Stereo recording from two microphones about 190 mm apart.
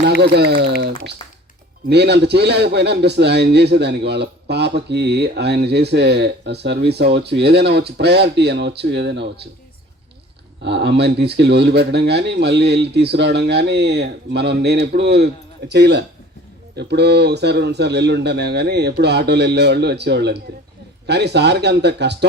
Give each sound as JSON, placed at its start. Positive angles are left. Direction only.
{"t": 0.2, "sound": "a man's voice", "side_deg": -60}
{"t": 10.6, "sound": "a man's voice", "side_deg": -65}